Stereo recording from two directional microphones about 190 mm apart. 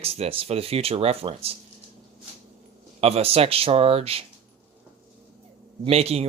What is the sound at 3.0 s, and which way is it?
Speech, 30° right (ahead or behind).